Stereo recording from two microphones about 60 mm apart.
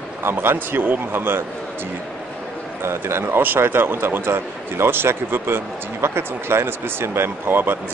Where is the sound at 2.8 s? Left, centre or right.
Right.